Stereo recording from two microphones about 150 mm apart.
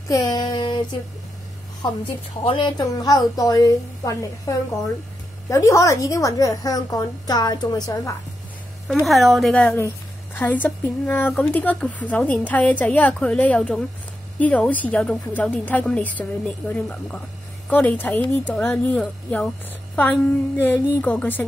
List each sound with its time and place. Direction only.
0.1 s a woman's voice: 25° left (ahead or behind)
2.4 s speech: 35° left (ahead or behind)
2.8 s a woman's voice: 25° left (ahead or behind)
5.5 s a woman's voice: 20° left (ahead or behind)
9.0 s a woman's voice: centre (ahead or behind)